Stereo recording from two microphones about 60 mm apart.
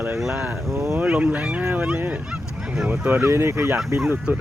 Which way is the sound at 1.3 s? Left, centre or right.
Right.